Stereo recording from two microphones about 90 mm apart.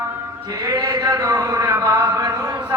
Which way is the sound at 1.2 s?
35° right (ahead or behind).